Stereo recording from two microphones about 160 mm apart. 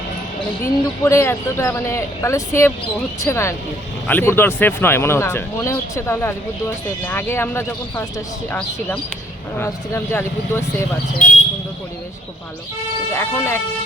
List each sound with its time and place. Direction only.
0.6 s speech: 15° left (ahead or behind)
13.1 s speech: 15° left (ahead or behind)